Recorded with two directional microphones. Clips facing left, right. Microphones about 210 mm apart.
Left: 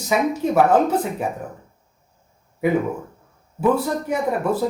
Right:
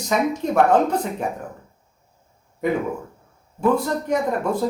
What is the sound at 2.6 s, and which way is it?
Speech, 5° left (ahead or behind).